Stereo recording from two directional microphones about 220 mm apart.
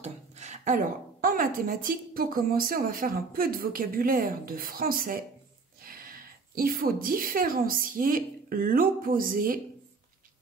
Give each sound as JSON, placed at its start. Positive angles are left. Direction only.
{"t": 0.0, "sound": "a woman's voice", "side_deg": -30}